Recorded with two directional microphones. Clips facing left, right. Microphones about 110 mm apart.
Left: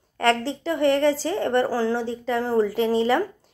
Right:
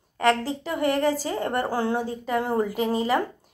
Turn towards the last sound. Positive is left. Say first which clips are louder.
# left 3 dB
turn(degrees=-10)  # may be behind; listen again after turning